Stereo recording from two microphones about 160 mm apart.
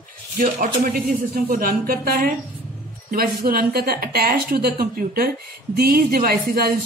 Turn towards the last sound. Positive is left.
turn(degrees=-70)  # may be behind; listen again after turning